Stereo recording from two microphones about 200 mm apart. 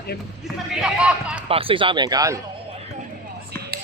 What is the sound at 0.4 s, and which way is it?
Speech, 5° right (ahead or behind).